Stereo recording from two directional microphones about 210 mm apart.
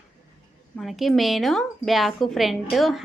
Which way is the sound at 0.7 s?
Centre (ahead or behind).